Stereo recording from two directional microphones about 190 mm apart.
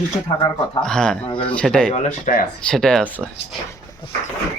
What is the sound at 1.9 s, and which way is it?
Speech, 40° left (ahead or behind).